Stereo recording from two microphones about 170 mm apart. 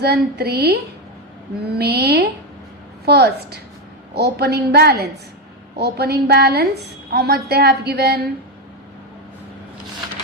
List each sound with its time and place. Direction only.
0.0 s a woman's voice: 70° right (ahead or behind)
1.8 s a woman's voice: 70° right (ahead or behind)